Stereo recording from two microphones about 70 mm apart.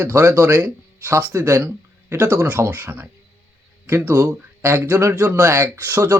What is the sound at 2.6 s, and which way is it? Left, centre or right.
Speech, right.